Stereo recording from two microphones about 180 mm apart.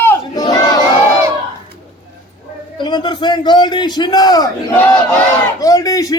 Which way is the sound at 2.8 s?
25° left (ahead or behind).